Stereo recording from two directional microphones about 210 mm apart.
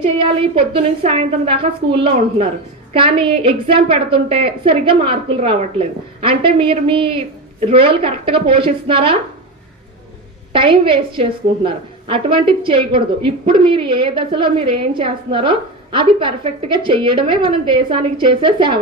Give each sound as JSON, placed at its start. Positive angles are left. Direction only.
{"t": 0.2, "sound": "a woman's voice", "side_deg": -25}
{"t": 10.5, "sound": "a woman's voice", "side_deg": -25}